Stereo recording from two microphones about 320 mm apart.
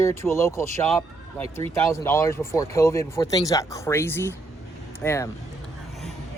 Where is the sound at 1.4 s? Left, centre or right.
Centre.